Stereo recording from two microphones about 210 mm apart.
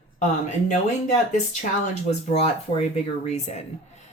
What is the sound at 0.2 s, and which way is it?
Speech, 35° left (ahead or behind).